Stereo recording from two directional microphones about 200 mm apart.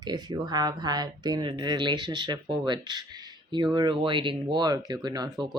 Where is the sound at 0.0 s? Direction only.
20° right (ahead or behind).